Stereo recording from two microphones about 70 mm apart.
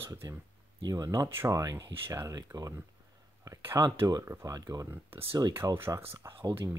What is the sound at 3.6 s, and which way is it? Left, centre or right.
Speech, right.